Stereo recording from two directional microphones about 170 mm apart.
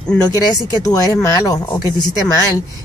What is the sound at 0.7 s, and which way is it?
Speech, 20° left (ahead or behind).